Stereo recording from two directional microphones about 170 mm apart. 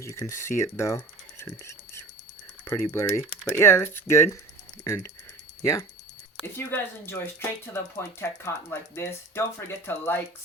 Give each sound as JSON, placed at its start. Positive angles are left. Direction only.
{"t": 0.0, "sound": "speech", "side_deg": 15}
{"t": 2.6, "sound": "speech", "side_deg": 15}
{"t": 6.4, "sound": "speech", "side_deg": 15}